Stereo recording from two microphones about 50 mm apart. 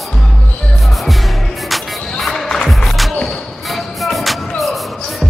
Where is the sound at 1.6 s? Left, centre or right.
Centre.